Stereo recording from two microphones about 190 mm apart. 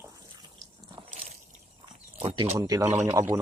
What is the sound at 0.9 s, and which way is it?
Biting, 25° right (ahead or behind).